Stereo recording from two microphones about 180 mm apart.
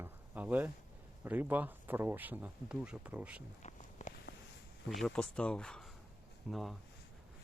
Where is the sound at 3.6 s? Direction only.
40° left (ahead or behind).